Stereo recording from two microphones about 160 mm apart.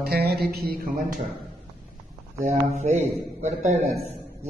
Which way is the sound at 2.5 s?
45° right (ahead or behind).